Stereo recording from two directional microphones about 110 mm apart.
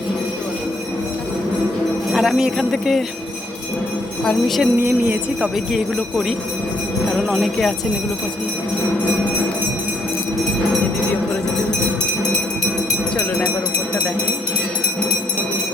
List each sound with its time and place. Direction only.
2.1 s speech: 5° right (ahead or behind)
4.2 s speech: 5° left (ahead or behind)
4.8 s speech: 20° right (ahead or behind)
5.7 s speech: centre (ahead or behind)